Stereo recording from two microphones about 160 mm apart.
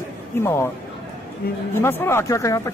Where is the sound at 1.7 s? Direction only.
15° left (ahead or behind).